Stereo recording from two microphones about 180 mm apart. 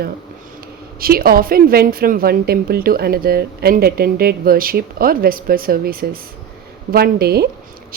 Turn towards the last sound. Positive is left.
turn(degrees=-60)  # may be behind; listen again after turning